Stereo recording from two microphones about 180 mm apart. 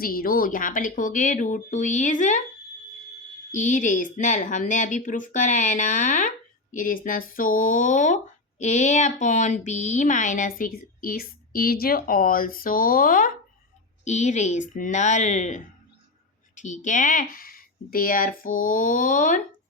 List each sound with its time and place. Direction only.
0.0 s speech: 55° left (ahead or behind)
3.5 s speech: 45° left (ahead or behind)
14.0 s speech: 40° left (ahead or behind)